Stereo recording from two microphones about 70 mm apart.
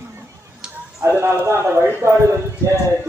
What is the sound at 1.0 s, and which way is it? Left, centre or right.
A man's voice, right.